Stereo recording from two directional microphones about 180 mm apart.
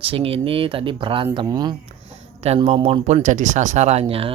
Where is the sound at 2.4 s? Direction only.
35° right (ahead or behind).